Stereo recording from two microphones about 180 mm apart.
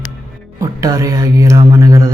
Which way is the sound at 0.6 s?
20° right (ahead or behind).